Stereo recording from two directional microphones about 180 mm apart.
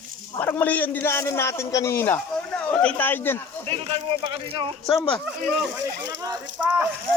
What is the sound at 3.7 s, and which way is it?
Speech, 30° right (ahead or behind).